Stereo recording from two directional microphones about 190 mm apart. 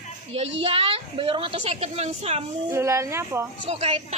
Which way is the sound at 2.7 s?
15° right (ahead or behind).